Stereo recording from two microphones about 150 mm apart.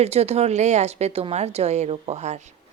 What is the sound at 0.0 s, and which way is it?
A woman's voice, 45° right (ahead or behind).